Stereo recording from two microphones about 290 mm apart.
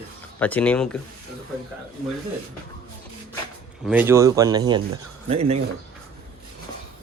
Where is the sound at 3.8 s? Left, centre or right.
Centre.